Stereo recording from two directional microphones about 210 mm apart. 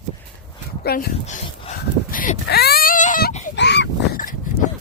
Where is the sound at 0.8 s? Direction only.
45° left (ahead or behind).